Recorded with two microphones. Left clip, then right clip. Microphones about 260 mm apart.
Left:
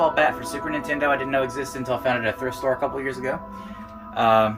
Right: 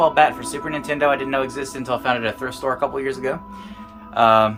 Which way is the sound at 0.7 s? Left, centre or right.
Centre.